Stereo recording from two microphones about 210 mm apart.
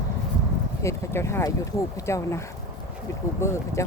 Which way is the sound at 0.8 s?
15° left (ahead or behind).